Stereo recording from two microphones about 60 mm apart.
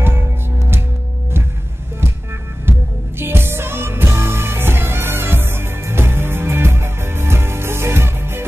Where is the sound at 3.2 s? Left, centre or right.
Right.